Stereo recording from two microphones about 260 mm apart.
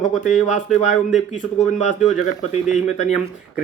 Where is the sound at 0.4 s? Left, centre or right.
Left.